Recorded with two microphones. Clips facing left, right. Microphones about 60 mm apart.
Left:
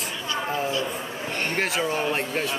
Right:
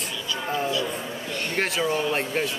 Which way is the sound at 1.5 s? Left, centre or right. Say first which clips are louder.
Right 2 dB; centre.